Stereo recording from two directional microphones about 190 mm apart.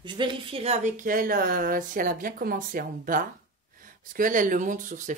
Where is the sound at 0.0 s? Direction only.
25° right (ahead or behind).